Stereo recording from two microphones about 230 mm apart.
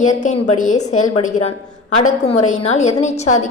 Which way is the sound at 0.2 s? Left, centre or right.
Left.